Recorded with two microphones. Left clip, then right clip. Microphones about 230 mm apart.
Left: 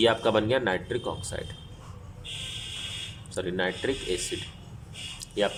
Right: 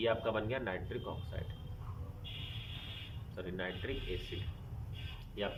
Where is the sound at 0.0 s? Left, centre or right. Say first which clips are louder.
Left 11 dB; left.